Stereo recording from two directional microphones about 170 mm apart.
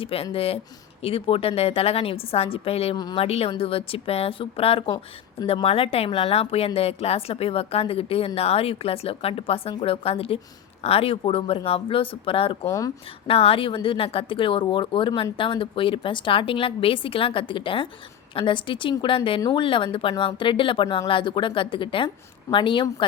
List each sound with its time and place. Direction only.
0.0 s a woman's voice: 35° left (ahead or behind)
3.0 s a woman's voice: 25° left (ahead or behind)
3.2 s a woman's voice: 35° left (ahead or behind)
12.6 s a woman's voice: 20° left (ahead or behind)
13.2 s a woman's voice: 35° left (ahead or behind)